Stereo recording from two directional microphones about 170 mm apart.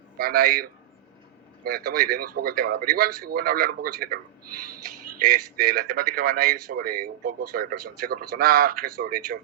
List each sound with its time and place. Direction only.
0.2 s a man's voice: 60° right (ahead or behind)
5.2 s a man's voice: 60° right (ahead or behind)